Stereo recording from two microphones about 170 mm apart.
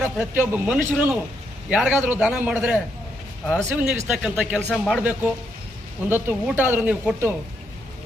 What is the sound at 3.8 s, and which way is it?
A man's voice, 5° right (ahead or behind).